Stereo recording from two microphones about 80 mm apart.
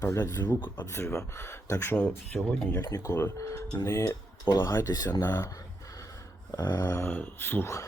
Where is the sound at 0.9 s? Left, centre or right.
Left.